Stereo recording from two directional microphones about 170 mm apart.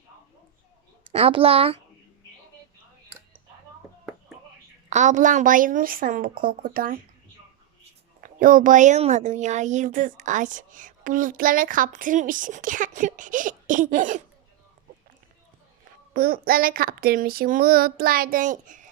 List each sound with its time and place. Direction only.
1.1 s a child's voice: 35° right (ahead or behind)
4.9 s speech: 45° right (ahead or behind)
8.2 s speech: 55° right (ahead or behind)
16.1 s speech: 60° right (ahead or behind)